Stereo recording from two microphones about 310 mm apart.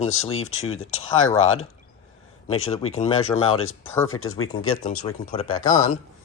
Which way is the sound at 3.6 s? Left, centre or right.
Left.